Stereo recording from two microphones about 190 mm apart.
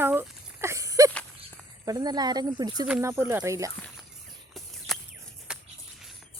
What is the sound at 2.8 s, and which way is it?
Speech, 10° right (ahead or behind).